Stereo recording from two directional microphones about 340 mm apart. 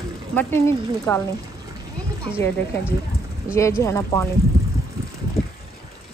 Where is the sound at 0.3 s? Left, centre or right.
Centre.